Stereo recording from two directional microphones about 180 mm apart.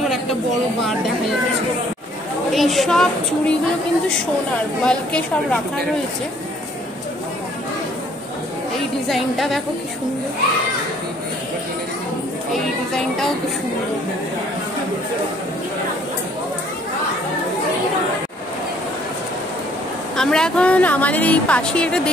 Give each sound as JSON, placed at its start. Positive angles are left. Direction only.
{"t": 2.5, "sound": "a woman's voice", "side_deg": 0}
{"t": 4.8, "sound": "a woman's voice", "side_deg": 5}
{"t": 8.7, "sound": "music", "side_deg": 0}
{"t": 20.2, "sound": "a woman's voice", "side_deg": 5}